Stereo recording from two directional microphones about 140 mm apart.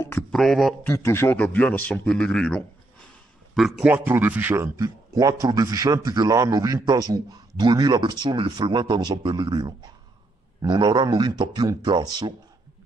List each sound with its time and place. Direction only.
0.3 s a man's voice: centre (ahead or behind)
0.8 s a man's voice: 20° left (ahead or behind); by 3.9 s centre (ahead or behind)
3.9 s speech: 15° right (ahead or behind); by 12.4 s 30° right (ahead or behind)